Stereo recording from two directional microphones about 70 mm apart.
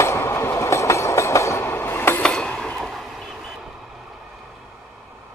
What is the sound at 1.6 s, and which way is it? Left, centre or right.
Train, left.